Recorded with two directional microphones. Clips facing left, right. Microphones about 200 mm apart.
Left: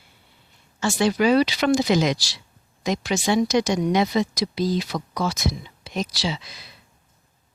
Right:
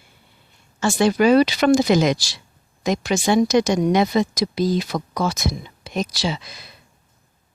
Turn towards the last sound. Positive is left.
turn(degrees=-50)  # may be behind; listen again after turning